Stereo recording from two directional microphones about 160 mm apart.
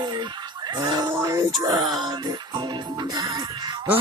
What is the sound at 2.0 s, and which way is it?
Music, 25° right (ahead or behind).